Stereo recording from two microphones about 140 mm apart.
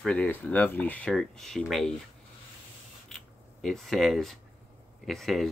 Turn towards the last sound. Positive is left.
turn(degrees=0)  # may be behind; listen again after turning